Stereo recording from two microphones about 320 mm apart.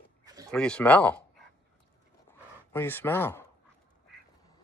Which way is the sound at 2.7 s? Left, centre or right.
Centre.